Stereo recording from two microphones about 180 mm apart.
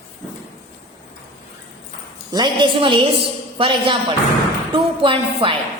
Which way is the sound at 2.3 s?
25° right (ahead or behind).